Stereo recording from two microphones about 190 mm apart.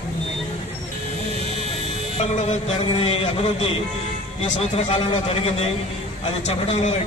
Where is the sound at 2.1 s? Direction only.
35° left (ahead or behind).